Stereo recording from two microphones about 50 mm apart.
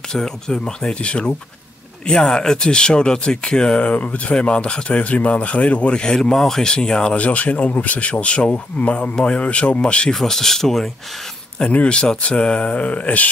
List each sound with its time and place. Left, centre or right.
0.1 s speech: centre
7.2 s speech: left
10.1 s speech: centre
11.5 s speech: left